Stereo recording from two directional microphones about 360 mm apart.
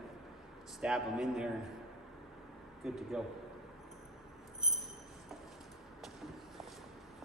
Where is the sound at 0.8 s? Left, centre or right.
Centre.